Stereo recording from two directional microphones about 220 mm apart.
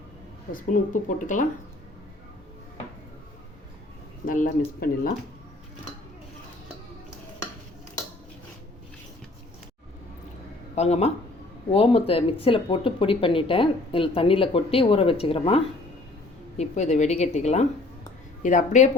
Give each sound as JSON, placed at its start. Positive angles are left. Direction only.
{"t": 0.5, "sound": "a woman's voice", "side_deg": 35}
{"t": 4.3, "sound": "a woman's voice", "side_deg": 35}
{"t": 10.8, "sound": "a woman's voice", "side_deg": 30}